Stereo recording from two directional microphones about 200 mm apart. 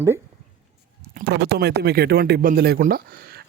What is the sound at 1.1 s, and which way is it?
Speech, 55° right (ahead or behind).